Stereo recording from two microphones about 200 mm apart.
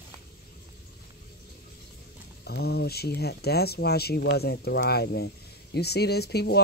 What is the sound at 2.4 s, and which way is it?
Speech, 55° left (ahead or behind).